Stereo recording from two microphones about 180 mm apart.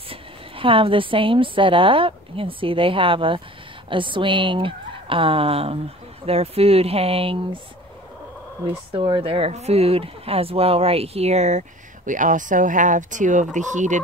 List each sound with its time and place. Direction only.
0.1 s a woman's voice: 30° right (ahead or behind)
8.9 s speech: 30° right (ahead or behind)